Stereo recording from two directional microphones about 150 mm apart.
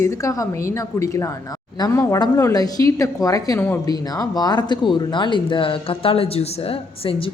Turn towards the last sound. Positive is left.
turn(degrees=40)  # may be behind; listen again after turning